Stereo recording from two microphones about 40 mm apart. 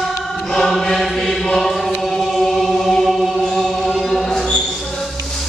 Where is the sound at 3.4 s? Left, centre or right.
Centre.